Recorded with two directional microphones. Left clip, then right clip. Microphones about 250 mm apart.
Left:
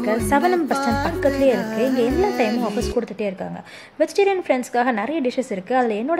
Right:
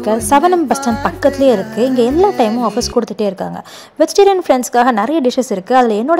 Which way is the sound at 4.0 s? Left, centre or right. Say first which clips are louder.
Right 8 dB; centre.